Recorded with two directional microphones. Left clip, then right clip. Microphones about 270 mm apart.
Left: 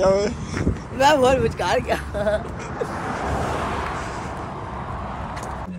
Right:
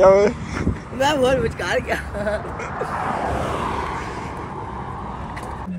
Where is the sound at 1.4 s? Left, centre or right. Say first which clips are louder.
Left 1 dB; left.